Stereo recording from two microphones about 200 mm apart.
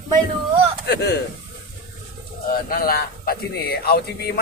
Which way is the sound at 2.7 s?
50° left (ahead or behind).